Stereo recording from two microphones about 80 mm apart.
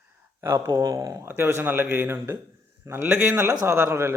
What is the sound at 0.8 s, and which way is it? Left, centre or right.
Speech, right.